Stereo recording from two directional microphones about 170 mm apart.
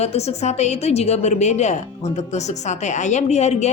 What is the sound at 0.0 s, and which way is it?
A woman's voice, 40° left (ahead or behind).